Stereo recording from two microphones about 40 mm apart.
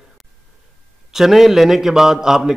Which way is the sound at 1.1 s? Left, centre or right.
Centre.